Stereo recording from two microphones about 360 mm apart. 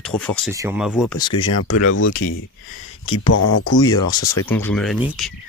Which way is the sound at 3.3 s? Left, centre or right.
Left.